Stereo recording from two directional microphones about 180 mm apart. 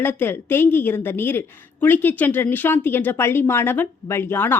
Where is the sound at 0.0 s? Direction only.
10° left (ahead or behind).